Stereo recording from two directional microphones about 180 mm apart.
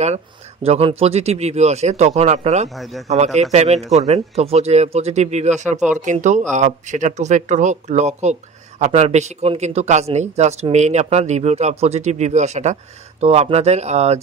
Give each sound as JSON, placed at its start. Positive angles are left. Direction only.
{"t": 0.7, "sound": "speech", "side_deg": -30}